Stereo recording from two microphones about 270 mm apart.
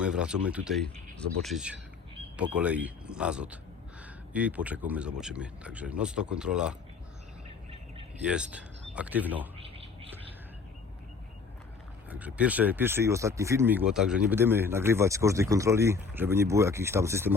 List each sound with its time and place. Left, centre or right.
0.0 s speech: centre
8.2 s speech: centre
9.6 s a sound: right
12.1 s speech: centre